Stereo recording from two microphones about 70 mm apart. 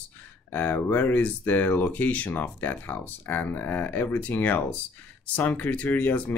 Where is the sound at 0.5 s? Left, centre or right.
Left.